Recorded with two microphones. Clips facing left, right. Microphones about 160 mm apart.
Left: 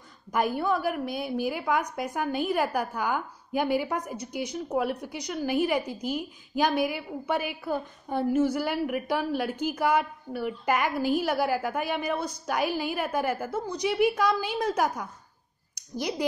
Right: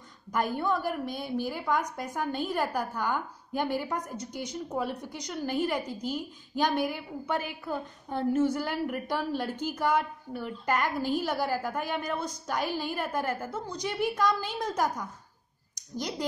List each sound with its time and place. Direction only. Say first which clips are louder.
0.3 s a woman's voice: left 2 dB; 5° left (ahead or behind)